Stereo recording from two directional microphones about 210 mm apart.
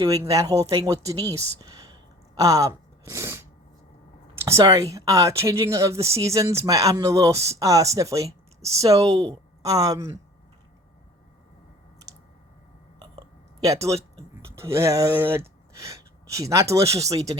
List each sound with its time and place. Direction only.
0.0 s speech: 15° right (ahead or behind)
4.4 s speech: 15° right (ahead or behind)
13.1 s a sound: 15° right (ahead or behind)
14.4 s speech: 15° right (ahead or behind)